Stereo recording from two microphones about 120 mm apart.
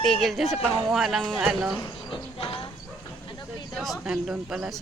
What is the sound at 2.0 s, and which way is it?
Music, 50° left (ahead or behind).